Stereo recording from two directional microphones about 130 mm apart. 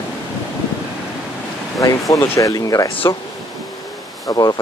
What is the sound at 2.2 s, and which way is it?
Speech, 25° left (ahead or behind).